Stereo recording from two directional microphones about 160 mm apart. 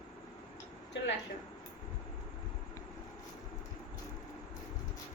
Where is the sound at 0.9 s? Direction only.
90° left.